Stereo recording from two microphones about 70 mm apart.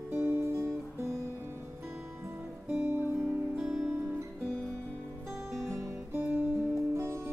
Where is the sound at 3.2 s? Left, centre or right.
Centre.